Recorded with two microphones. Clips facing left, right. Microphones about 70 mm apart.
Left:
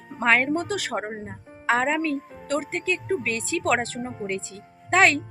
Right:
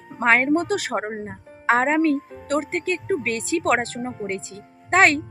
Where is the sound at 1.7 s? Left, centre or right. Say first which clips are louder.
Right 4 dB; right.